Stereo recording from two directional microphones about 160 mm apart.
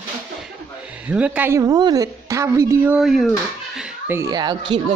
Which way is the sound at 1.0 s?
10° right (ahead or behind).